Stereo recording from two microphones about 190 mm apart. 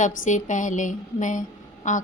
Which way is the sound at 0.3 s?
40° left (ahead or behind).